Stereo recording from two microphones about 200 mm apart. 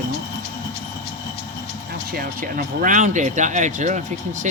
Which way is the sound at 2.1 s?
45° right (ahead or behind).